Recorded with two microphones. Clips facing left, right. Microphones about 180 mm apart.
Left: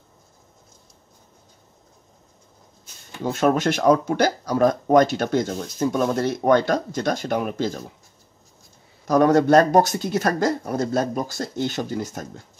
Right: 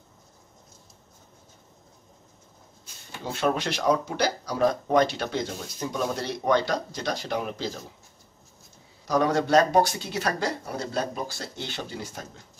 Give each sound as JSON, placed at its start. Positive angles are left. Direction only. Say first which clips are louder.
{"t": 3.3, "sound": "speech", "louder": "left 7 dB", "side_deg": 45}
{"t": 9.0, "sound": "speech", "louder": "left 7 dB", "side_deg": 50}